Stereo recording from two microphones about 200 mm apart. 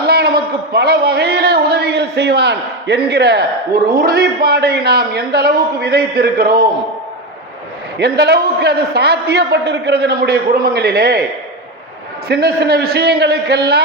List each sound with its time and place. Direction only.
0.1 s a sound: 55° right (ahead or behind)
0.7 s a man's voice: 55° right (ahead or behind)
7.9 s a man's voice: 55° right (ahead or behind)
12.3 s a man's voice: 50° right (ahead or behind)